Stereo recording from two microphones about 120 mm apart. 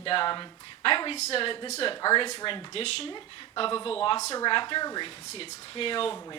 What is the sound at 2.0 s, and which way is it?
Speech, 40° left (ahead or behind).